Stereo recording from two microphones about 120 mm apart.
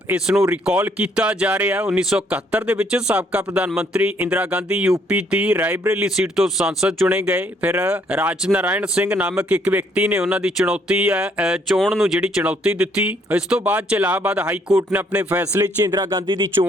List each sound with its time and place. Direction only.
0.1 s speech: 5° right (ahead or behind)
6.1 s speech: 5° right (ahead or behind)
15.6 s speech: 30° right (ahead or behind)